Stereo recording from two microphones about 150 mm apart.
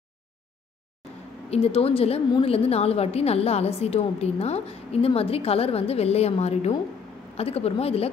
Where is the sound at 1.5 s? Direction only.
40° left (ahead or behind).